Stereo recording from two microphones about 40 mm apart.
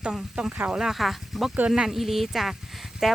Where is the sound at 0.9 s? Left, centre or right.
Centre.